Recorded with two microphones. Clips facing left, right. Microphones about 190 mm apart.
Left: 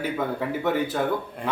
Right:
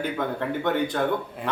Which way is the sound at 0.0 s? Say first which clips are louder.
Even; 5° left (ahead or behind).